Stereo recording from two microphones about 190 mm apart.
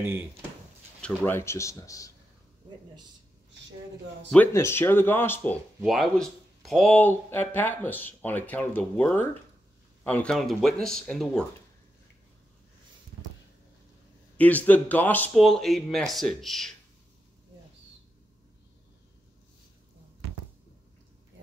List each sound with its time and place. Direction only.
1.0 s speech: 10° left (ahead or behind)
4.3 s speech: 10° left (ahead or behind)
5.8 s speech: centre (ahead or behind)
14.3 s speech: 10° left (ahead or behind)